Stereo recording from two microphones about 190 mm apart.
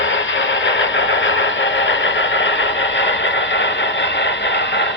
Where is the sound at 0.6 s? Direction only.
75° left (ahead or behind).